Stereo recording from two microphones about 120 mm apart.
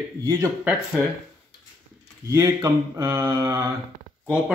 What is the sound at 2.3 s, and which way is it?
Mantra, 25° right (ahead or behind).